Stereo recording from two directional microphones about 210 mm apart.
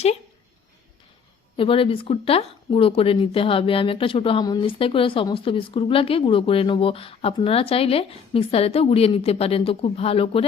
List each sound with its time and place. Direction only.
1.5 s speech: 25° left (ahead or behind)